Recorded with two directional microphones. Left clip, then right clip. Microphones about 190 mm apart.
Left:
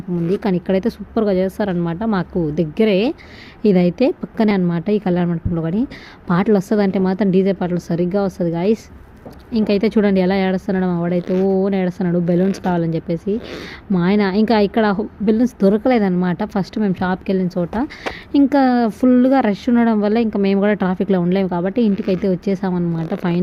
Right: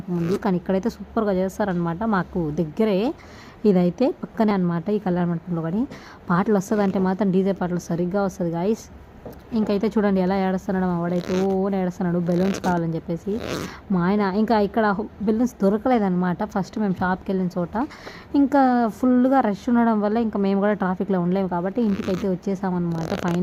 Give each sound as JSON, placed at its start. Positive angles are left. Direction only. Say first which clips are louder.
{"t": 0.3, "sound": "speech", "louder": "left 5 dB", "side_deg": 0}
{"t": 11.2, "sound": "speech", "louder": "left 6 dB", "side_deg": -55}
{"t": 11.4, "sound": "speech", "louder": "left 5 dB", "side_deg": 5}
{"t": 23.0, "sound": "speech", "louder": "left 2 dB", "side_deg": -50}